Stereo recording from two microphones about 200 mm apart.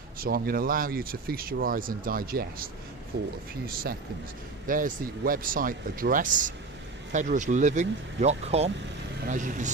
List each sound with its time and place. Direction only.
0.2 s speech: 50° right (ahead or behind)
4.6 s speech: 45° right (ahead or behind)